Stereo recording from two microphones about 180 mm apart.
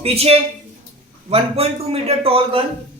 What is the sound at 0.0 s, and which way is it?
A man's voice, 35° right (ahead or behind).